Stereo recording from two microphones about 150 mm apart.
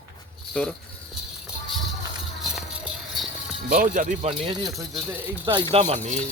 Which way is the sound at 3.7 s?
65° right (ahead or behind).